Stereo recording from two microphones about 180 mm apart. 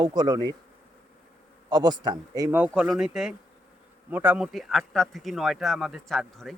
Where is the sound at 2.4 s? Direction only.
10° right (ahead or behind).